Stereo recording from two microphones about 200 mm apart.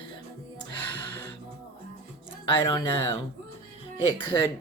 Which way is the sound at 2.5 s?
25° left (ahead or behind).